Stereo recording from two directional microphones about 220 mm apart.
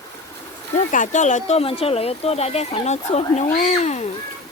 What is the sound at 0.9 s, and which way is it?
Speech, 35° left (ahead or behind).